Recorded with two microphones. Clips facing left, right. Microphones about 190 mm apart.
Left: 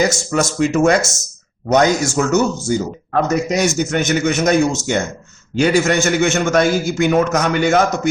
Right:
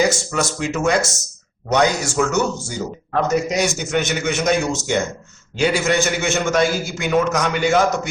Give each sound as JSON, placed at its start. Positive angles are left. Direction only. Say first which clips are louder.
{"t": 0.3, "sound": "speech", "louder": "left 6 dB", "side_deg": 45}